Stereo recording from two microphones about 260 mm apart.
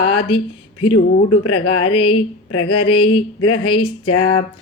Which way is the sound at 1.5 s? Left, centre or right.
Left.